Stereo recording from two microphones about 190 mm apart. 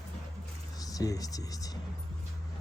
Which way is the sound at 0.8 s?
20° left (ahead or behind).